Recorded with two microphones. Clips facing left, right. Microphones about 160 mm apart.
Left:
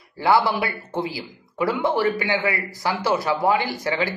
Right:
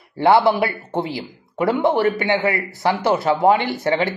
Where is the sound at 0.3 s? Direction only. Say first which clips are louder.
Right 4 dB; 20° right (ahead or behind).